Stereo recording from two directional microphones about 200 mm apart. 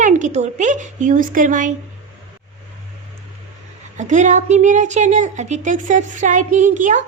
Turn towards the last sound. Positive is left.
turn(degrees=-40)  # may be behind; listen again after turning